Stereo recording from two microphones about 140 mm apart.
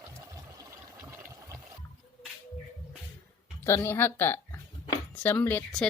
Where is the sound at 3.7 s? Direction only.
20° left (ahead or behind).